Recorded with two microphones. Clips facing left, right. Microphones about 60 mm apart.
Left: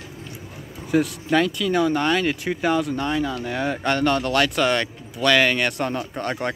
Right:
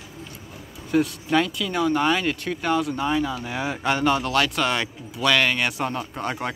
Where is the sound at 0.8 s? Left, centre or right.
Centre.